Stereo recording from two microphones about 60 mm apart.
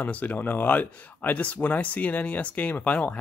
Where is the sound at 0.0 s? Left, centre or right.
Left.